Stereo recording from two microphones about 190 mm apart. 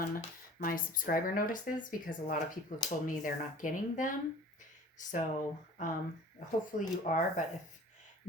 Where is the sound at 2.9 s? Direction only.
45° left (ahead or behind).